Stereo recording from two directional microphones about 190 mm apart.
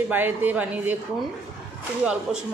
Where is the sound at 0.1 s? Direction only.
10° right (ahead or behind).